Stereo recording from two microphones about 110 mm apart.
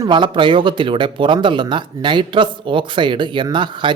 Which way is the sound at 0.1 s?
50° right (ahead or behind).